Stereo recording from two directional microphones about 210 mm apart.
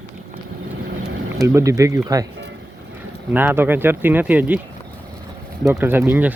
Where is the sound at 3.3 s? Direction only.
10° right (ahead or behind).